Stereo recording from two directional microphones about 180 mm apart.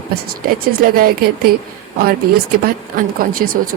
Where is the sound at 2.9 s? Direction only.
50° right (ahead or behind).